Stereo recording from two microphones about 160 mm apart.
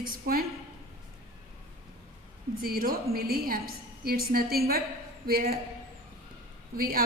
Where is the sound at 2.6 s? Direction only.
65° right (ahead or behind).